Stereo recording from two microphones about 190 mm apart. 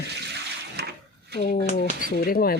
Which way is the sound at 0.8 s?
60° right (ahead or behind).